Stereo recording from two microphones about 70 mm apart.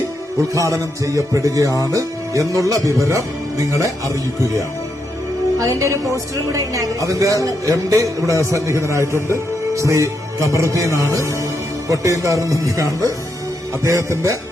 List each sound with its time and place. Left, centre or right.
0.5 s speech: right